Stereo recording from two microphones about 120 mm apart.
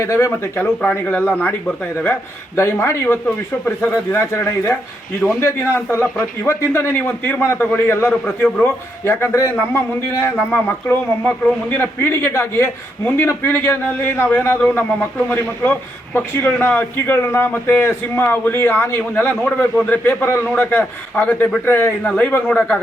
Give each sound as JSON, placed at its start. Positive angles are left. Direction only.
{"t": 0.0, "sound": "a man's voice", "side_deg": 25}